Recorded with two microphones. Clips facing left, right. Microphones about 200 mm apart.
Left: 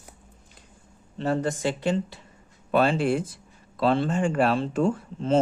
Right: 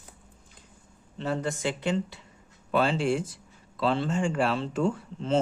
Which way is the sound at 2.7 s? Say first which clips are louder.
Left 3 dB; 55° left (ahead or behind).